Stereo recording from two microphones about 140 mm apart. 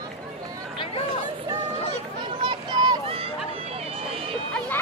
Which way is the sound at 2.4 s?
30° right (ahead or behind).